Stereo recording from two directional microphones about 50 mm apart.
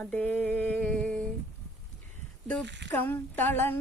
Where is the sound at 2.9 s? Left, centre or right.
Left.